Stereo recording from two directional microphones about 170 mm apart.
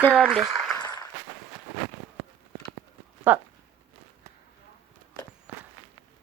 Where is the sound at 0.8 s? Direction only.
20° left (ahead or behind).